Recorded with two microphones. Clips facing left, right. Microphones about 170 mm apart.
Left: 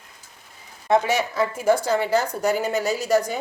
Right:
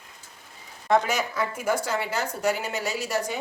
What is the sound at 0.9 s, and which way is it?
A woman's voice, 25° left (ahead or behind).